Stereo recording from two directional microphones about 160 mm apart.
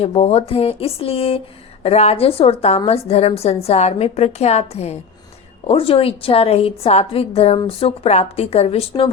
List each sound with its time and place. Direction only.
0.0 s a woman's voice: 40° left (ahead or behind)